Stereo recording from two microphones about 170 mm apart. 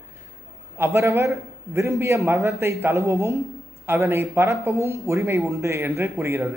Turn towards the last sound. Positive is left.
turn(degrees=-15)  # may be behind; listen again after turning